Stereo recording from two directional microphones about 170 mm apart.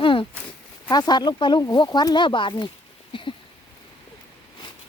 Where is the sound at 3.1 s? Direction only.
30° left (ahead or behind).